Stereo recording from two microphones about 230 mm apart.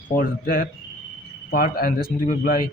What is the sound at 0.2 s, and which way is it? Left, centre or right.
Speech, left.